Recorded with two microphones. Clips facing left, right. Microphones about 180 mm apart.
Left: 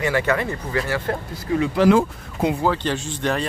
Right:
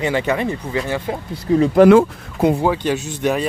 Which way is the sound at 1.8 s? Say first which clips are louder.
Right 6 dB; 55° right (ahead or behind).